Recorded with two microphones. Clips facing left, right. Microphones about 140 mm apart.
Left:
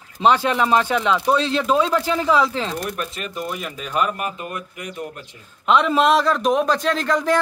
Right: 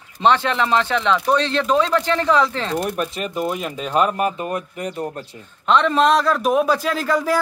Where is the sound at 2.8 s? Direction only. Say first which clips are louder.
Right 4 dB; 35° right (ahead or behind).